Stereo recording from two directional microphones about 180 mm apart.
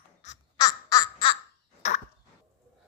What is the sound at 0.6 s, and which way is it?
Baby laughter, 20° left (ahead or behind).